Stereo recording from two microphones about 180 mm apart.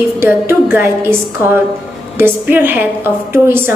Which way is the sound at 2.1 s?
10° right (ahead or behind).